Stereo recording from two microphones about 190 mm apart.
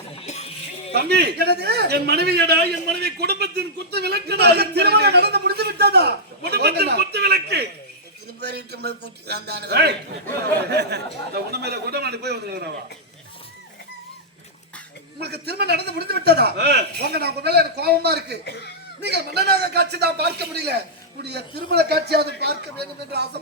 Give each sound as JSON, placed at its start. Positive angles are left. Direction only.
{"t": 0.2, "sound": "a sound", "side_deg": 35}
{"t": 0.9, "sound": "a man's voice", "side_deg": -60}
{"t": 15.2, "sound": "a man's voice", "side_deg": -60}